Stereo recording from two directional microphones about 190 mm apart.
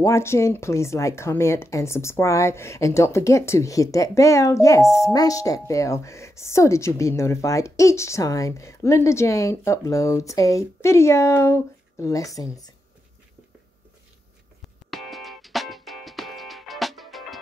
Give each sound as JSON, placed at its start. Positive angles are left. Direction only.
{"t": 0.0, "sound": "speech", "side_deg": 15}
{"t": 14.9, "sound": "music", "side_deg": 0}